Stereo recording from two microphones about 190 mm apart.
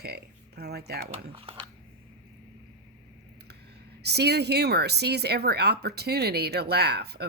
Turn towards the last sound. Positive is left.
turn(degrees=-60)  # may be behind; listen again after turning